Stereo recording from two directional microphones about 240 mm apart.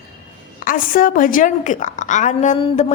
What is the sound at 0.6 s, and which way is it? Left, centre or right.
A woman's voice, left.